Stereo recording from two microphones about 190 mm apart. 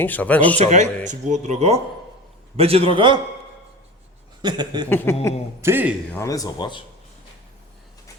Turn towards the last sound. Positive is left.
turn(degrees=25)  # may be behind; listen again after turning